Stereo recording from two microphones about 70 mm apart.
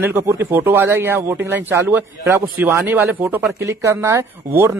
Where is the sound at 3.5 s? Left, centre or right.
Right.